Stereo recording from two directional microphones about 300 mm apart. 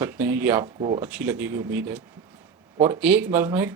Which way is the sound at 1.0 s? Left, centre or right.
Centre.